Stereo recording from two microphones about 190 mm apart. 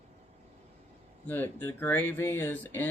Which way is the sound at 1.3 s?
10° left (ahead or behind).